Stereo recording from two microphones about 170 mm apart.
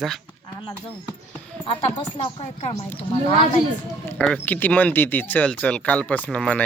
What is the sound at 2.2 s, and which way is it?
Speech, 40° left (ahead or behind).